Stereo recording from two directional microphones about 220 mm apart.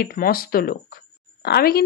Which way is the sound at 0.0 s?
45° left (ahead or behind).